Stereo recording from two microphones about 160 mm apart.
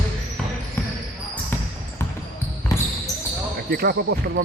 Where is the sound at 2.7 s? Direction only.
20° left (ahead or behind).